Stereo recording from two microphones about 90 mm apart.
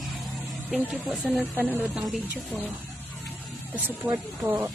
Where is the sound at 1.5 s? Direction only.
20° right (ahead or behind).